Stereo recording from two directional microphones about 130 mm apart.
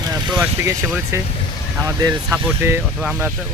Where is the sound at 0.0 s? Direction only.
30° right (ahead or behind).